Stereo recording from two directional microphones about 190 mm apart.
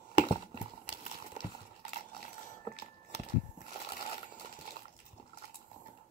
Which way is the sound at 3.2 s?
40° left (ahead or behind).